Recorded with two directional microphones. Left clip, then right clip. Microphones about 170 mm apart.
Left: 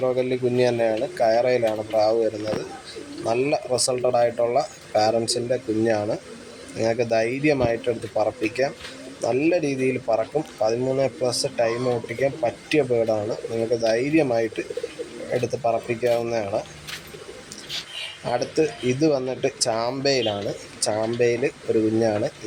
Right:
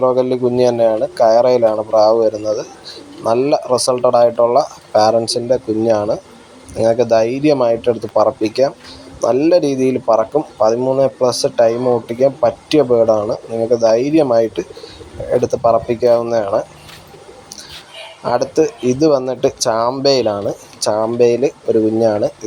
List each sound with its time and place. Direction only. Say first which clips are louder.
0.0 s speech: right 9 dB; 20° right (ahead or behind)
18.3 s speech: right 8 dB; 15° right (ahead or behind)